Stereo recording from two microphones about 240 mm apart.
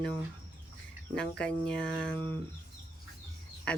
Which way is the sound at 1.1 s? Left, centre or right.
Centre.